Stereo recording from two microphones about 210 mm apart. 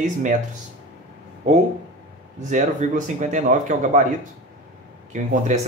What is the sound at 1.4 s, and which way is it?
Speech, 30° right (ahead or behind).